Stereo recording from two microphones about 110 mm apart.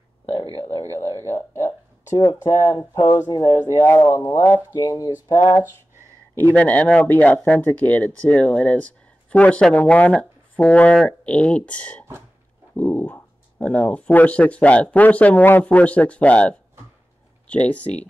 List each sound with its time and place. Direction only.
1.2 s speech: 25° left (ahead or behind)
2.9 s speech: 35° left (ahead or behind)
3.8 s speech: 25° left (ahead or behind); by 5.6 s 40° left (ahead or behind)
6.3 s speech: 15° left (ahead or behind)